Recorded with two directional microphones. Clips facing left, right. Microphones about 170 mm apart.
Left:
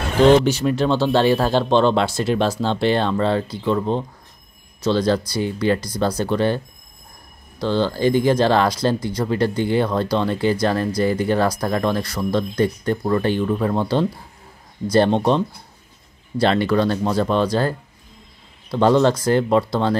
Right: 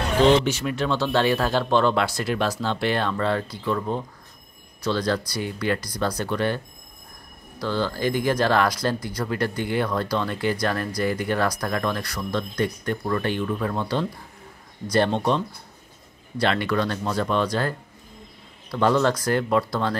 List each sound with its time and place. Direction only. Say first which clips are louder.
0.5 s speech: left 6 dB; 35° left (ahead or behind)